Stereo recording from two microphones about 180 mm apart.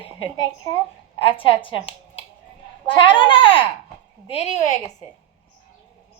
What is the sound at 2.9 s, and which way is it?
A woman's voice, 25° left (ahead or behind).